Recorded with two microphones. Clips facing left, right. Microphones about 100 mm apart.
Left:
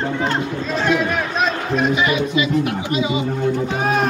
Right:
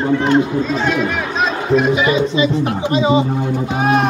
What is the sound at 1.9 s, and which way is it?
Speech, 25° right (ahead or behind).